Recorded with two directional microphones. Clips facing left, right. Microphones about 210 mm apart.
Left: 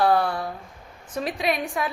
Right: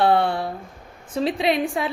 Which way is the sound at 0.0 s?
25° right (ahead or behind).